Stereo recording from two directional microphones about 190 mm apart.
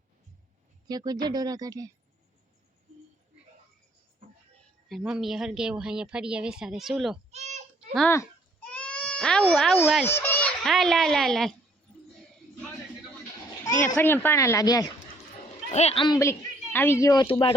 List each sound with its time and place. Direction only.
0.9 s speech: 20° right (ahead or behind)
4.9 s speech: centre (ahead or behind)
7.3 s a sound: 35° right (ahead or behind)
8.1 s baby cry: 10° left (ahead or behind)
10.1 s a sound: 10° left (ahead or behind)
10.6 s speech: centre (ahead or behind)
13.8 s speech: 10° left (ahead or behind)
15.7 s speech: 35° left (ahead or behind)